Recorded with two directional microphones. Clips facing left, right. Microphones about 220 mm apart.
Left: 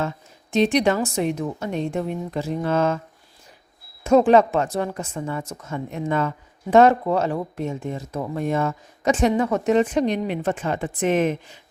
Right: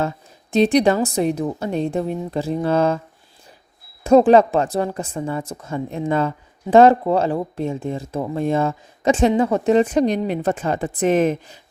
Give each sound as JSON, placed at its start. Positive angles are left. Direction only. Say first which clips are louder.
{"t": 0.5, "sound": "speech", "louder": "right 3 dB", "side_deg": -35}
{"t": 4.0, "sound": "speech", "louder": "right 3 dB", "side_deg": -35}